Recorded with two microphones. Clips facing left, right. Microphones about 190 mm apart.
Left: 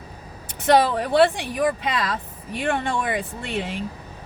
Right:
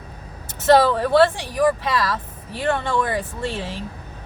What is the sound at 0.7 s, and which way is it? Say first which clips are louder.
Speech: right 3 dB; 15° left (ahead or behind).